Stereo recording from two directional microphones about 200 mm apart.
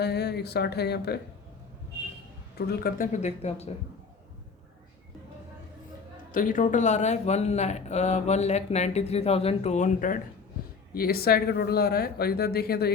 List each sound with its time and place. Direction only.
0.0 s speech: 55° left (ahead or behind)
2.6 s speech: 50° left (ahead or behind); by 3.7 s 35° left (ahead or behind)
6.3 s speech: 45° left (ahead or behind)